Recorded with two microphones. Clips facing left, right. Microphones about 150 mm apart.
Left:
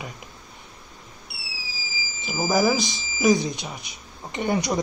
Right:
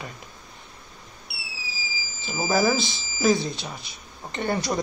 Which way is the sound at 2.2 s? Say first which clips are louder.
Left 1 dB; 10° left (ahead or behind).